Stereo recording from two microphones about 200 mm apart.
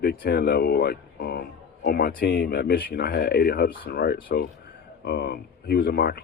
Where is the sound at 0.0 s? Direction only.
50° left (ahead or behind).